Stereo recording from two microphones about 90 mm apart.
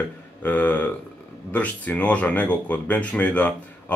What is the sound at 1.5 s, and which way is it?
Speech, 15° left (ahead or behind).